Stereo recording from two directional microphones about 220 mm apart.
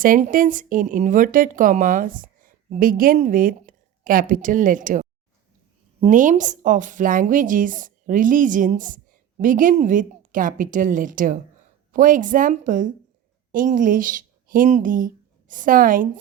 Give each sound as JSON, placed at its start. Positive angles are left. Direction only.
{"t": 0.0, "sound": "speech", "side_deg": -40}